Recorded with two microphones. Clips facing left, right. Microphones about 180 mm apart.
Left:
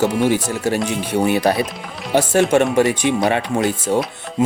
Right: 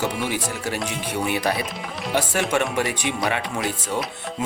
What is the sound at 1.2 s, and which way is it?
Speech, 40° left (ahead or behind).